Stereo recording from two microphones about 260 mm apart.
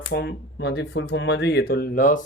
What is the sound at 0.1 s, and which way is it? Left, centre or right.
Speech, left.